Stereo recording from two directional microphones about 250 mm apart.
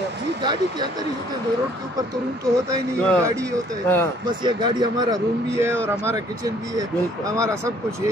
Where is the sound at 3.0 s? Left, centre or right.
Centre.